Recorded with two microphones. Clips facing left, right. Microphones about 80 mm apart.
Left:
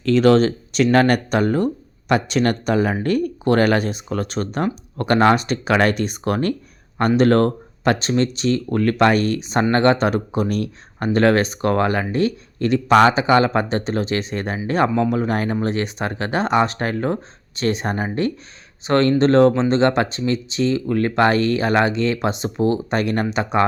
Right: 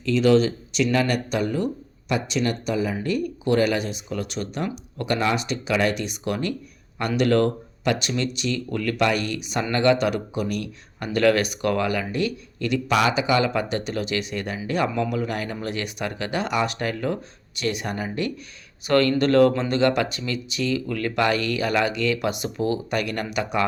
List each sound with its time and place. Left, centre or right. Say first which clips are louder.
0.0 s speech: left 4 dB; left